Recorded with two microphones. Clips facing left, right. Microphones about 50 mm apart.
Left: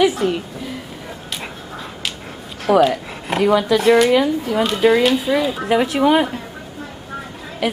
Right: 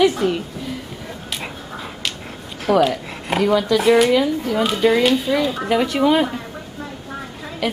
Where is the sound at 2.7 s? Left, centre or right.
Centre.